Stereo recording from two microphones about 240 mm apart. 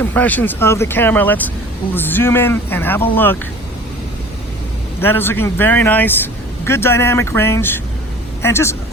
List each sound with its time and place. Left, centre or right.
0.0 s speech: centre
4.9 s speech: centre